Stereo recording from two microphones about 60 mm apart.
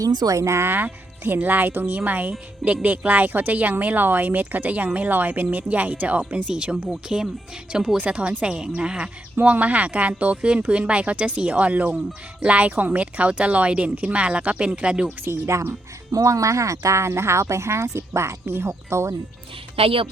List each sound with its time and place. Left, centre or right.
0.0 s speech: right
1.4 s speech: right
16.1 s speech: right